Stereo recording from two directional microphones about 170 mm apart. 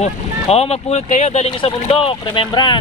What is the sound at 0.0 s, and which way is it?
Speech, 40° left (ahead or behind).